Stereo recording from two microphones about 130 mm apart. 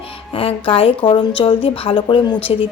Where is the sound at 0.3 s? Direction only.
45° left (ahead or behind).